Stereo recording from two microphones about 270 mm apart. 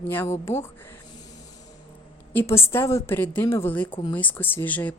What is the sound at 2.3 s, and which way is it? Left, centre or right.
A man's voice, centre.